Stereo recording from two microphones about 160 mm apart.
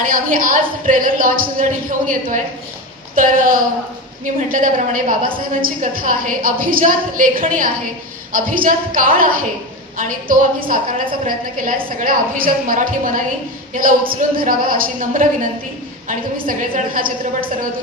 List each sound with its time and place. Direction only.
0.0 s a woman's voice: 60° right (ahead or behind)